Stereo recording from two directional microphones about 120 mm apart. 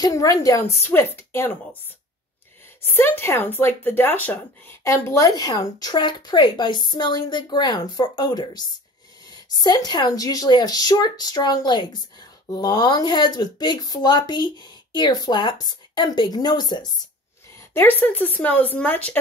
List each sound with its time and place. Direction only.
0.0 s a woman's voice: 30° left (ahead or behind)
2.9 s speech: 20° left (ahead or behind); by 16.9 s 35° left (ahead or behind)
17.7 s speech: 15° left (ahead or behind)